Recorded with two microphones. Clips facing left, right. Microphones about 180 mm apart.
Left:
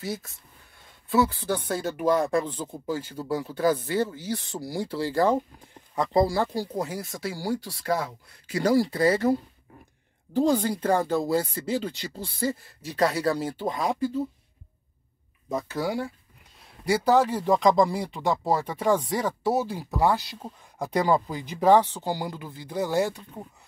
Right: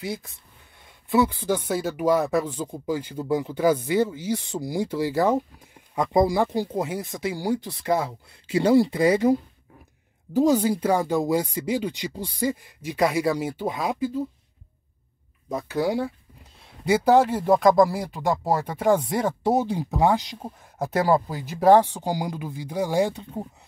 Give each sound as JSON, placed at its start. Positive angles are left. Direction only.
{"t": 0.0, "sound": "speech", "side_deg": -15}
{"t": 15.8, "sound": "speech", "side_deg": -20}
{"t": 20.8, "sound": "speech", "side_deg": -5}
{"t": 23.1, "sound": "speech", "side_deg": -25}